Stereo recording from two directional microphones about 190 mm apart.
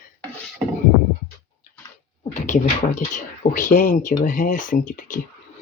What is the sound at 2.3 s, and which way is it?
Speech, 40° left (ahead or behind).